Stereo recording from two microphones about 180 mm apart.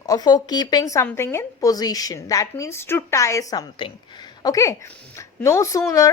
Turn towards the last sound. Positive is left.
turn(degrees=20)  # may be behind; listen again after turning